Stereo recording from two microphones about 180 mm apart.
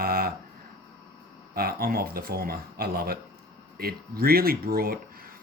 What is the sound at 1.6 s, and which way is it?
Speech, 55° right (ahead or behind).